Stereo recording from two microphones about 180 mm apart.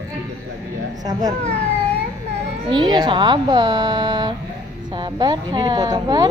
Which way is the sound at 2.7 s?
25° right (ahead or behind).